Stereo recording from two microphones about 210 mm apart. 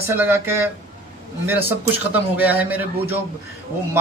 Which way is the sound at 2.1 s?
10° right (ahead or behind).